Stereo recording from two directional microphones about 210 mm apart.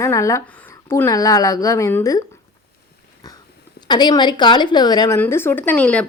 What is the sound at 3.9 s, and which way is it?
A woman's voice, 20° left (ahead or behind).